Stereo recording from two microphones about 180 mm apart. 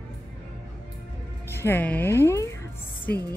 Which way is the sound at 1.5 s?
15° left (ahead or behind).